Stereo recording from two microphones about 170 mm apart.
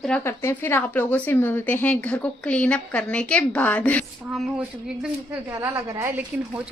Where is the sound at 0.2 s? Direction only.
15° left (ahead or behind); by 4.6 s centre (ahead or behind).